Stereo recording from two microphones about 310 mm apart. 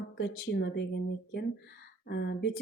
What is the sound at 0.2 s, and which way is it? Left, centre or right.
Speech, left.